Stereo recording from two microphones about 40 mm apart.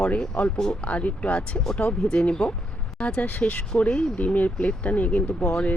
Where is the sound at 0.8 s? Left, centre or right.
Left.